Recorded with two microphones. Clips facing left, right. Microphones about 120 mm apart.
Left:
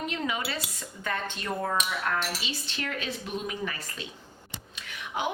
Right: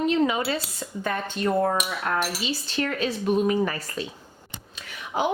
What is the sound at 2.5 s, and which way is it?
Speech, 40° right (ahead or behind).